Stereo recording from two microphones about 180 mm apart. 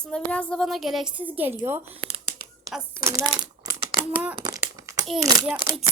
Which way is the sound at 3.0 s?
15° right (ahead or behind).